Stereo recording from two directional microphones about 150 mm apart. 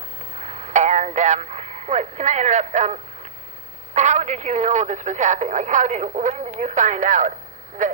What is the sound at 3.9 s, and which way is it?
Speech, 50° right (ahead or behind).